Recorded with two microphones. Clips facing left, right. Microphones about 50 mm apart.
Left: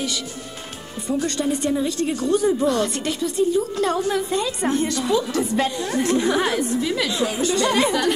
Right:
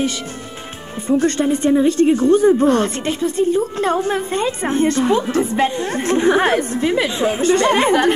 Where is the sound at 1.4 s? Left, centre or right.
Right.